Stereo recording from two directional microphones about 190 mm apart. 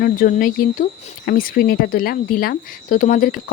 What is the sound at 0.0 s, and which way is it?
Speech, 45° left (ahead or behind).